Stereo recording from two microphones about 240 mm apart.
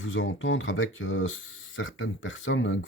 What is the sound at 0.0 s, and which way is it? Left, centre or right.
Speech, left.